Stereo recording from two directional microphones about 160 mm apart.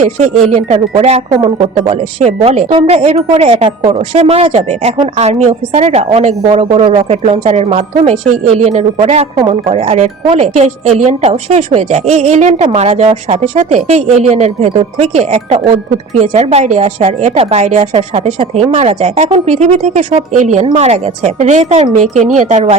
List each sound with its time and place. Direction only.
0.0 s speech: 45° right (ahead or behind)